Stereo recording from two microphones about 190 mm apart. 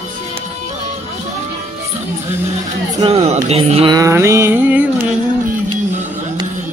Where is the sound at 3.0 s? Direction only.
30° right (ahead or behind).